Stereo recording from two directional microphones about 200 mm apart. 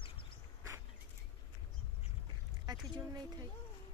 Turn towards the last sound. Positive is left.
turn(degrees=-20)  # may be behind; listen again after turning